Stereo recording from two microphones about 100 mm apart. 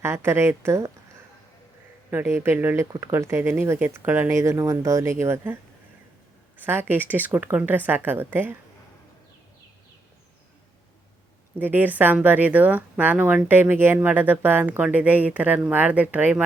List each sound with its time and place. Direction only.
0.0 s speech: 25° right (ahead or behind)
2.0 s speech: 25° right (ahead or behind)
6.6 s speech: 20° right (ahead or behind)
11.6 s speech: 20° right (ahead or behind)